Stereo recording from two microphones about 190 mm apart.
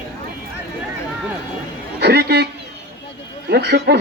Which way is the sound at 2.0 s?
55° right (ahead or behind).